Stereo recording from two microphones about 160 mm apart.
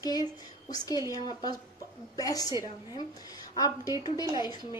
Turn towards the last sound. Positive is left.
turn(degrees=25)  # may be behind; listen again after turning